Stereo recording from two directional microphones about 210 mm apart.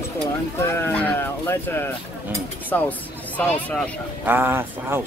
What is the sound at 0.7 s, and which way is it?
Speech, 10° left (ahead or behind).